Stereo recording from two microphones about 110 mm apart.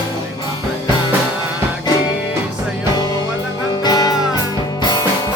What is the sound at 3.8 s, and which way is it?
Music, 40° left (ahead or behind).